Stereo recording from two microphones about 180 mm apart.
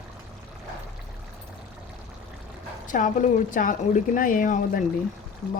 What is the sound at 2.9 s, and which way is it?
Speech, 45° left (ahead or behind).